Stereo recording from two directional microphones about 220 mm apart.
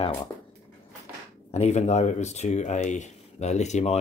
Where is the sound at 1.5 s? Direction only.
30° left (ahead or behind).